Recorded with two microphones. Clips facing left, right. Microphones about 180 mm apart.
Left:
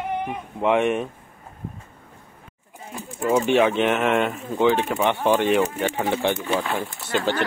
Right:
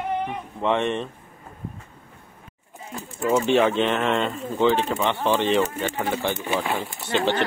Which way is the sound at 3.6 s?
15° left (ahead or behind).